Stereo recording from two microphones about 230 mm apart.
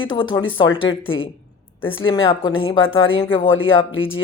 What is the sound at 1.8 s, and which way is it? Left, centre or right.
Speech, left.